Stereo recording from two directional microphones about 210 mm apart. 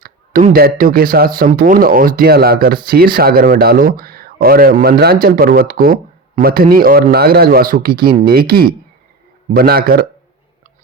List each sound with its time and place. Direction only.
0.0 s speech: 45° right (ahead or behind)